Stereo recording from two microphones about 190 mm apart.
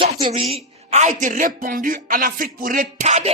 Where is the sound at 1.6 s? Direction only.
45° right (ahead or behind).